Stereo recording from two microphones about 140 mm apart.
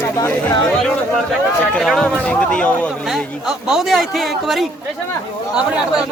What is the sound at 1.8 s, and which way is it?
Speech, 5° left (ahead or behind).